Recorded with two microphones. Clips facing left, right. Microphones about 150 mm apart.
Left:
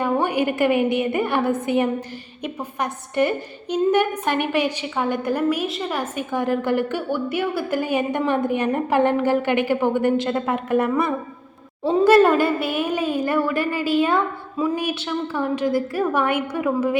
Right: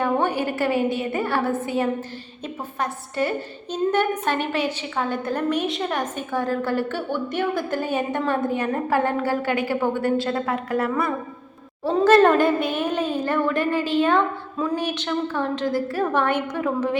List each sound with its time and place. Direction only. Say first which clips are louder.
0.0 s a woman's voice: left 1 dB; 15° left (ahead or behind)